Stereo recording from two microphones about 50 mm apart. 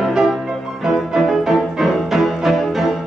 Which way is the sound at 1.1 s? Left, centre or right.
Centre.